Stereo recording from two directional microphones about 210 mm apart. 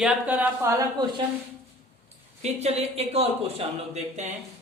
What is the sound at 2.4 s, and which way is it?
Speech, 30° right (ahead or behind).